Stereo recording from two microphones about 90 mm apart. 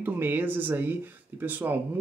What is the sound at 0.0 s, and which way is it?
Speech, 20° right (ahead or behind).